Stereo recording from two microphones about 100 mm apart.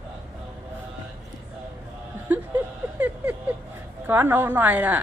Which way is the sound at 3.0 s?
15° right (ahead or behind).